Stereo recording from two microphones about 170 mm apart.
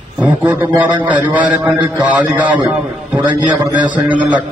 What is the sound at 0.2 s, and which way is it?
A man's voice, 10° right (ahead or behind).